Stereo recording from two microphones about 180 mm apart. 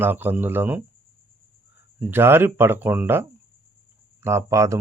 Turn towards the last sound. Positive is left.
turn(degrees=-15)  # may be behind; listen again after turning